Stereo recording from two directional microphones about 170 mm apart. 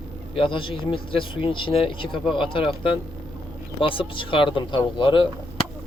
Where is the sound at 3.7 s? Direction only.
30° left (ahead or behind).